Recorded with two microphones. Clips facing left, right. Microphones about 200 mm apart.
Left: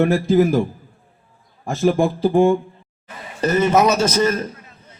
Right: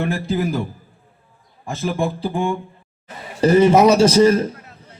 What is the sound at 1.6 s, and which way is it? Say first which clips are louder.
Speech: left 5 dB; 45° left (ahead or behind).